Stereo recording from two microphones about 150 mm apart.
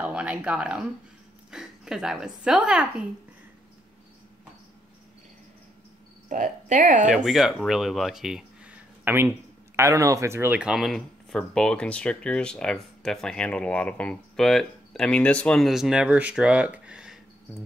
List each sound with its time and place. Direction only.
0.0 s speech: 10° right (ahead or behind)
6.2 s speech: 55° right (ahead or behind)
7.2 s speech: centre (ahead or behind)